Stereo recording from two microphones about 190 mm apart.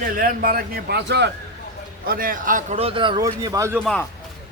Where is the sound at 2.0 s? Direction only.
50° right (ahead or behind); by 3.8 s 15° right (ahead or behind).